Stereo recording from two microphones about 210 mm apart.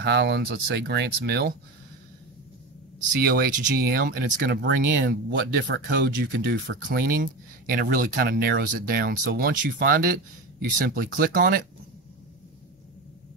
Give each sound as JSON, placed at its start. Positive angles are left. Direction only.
{"t": 0.0, "sound": "speech", "side_deg": -50}
{"t": 3.2, "sound": "speech", "side_deg": -45}
{"t": 6.9, "sound": "speech", "side_deg": -45}